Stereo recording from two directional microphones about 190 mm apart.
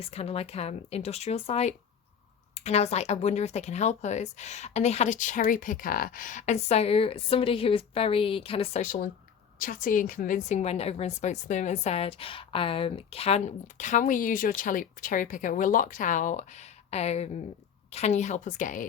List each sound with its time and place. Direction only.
0.0 s a woman's voice: 30° left (ahead or behind)
9.6 s a woman's voice: 45° left (ahead or behind)